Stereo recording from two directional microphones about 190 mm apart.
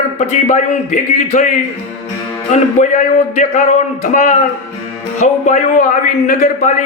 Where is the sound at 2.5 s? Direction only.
40° left (ahead or behind).